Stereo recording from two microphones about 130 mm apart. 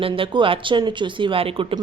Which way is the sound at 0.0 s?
40° right (ahead or behind).